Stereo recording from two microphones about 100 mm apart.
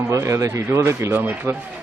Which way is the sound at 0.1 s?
30° right (ahead or behind).